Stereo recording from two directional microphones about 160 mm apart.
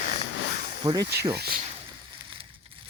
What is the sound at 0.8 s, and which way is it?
Speech, 25° right (ahead or behind).